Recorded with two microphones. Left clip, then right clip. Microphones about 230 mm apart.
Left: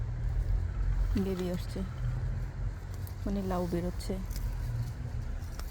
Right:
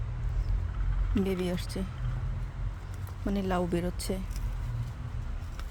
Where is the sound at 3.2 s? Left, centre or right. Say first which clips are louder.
Right 4 dB; centre.